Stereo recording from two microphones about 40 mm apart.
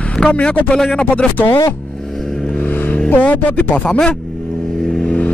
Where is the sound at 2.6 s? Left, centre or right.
Left.